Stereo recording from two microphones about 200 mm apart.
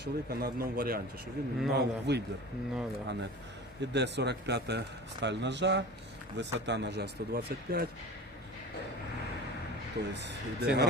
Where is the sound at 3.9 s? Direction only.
60° right (ahead or behind).